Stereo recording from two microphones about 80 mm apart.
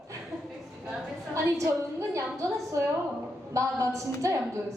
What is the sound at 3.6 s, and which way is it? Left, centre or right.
Speech, right.